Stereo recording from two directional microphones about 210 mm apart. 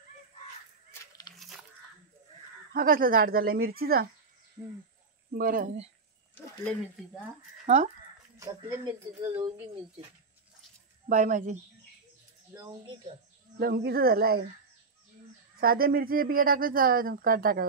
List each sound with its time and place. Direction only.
1.3 s a sound: centre (ahead or behind)
2.7 s speech: 40° right (ahead or behind)
5.3 s speech: 40° right (ahead or behind)
7.6 s speech: 35° right (ahead or behind)
8.4 s speech: 15° right (ahead or behind)
11.1 s speech: 35° right (ahead or behind)
12.5 s speech: 15° right (ahead or behind)
13.6 s speech: 45° right (ahead or behind)
15.6 s speech: 45° right (ahead or behind)